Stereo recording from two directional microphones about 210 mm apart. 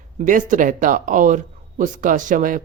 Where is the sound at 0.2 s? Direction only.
40° right (ahead or behind).